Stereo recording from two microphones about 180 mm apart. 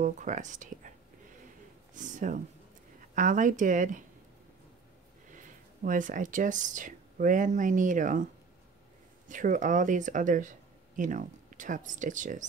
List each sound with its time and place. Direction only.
0.0 s speech: 45° right (ahead or behind)
2.0 s speech: 45° right (ahead or behind)
5.3 s speech: 45° right (ahead or behind)
9.3 s speech: 45° right (ahead or behind)